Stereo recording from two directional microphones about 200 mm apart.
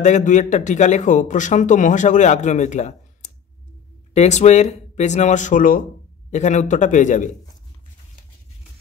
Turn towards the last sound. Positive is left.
turn(degrees=40)  # may be behind; listen again after turning